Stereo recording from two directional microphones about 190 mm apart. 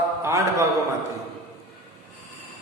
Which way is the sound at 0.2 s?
15° right (ahead or behind).